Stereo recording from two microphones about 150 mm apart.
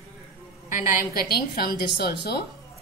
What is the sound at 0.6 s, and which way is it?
A woman's voice, 60° left (ahead or behind).